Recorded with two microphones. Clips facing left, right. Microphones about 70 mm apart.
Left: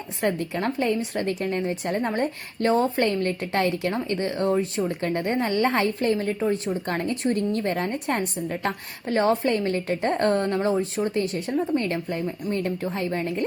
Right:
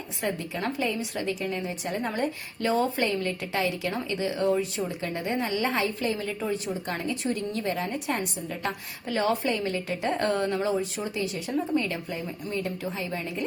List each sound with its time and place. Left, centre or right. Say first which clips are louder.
0.2 s a woman's voice: left 5 dB; left
6.8 s a woman's voice: left 5 dB; left
9.5 s a woman's voice: left 4 dB; left